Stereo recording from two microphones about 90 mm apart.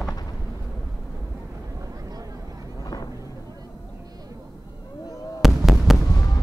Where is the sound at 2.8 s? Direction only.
45° left (ahead or behind).